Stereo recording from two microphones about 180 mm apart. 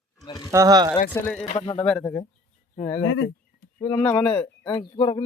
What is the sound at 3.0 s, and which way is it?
Speech, 90° left.